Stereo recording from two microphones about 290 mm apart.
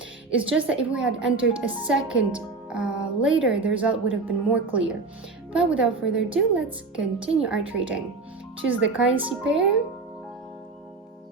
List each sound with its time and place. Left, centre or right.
0.3 s a woman's voice: centre